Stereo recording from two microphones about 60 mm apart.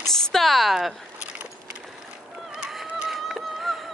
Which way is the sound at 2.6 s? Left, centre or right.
Centre.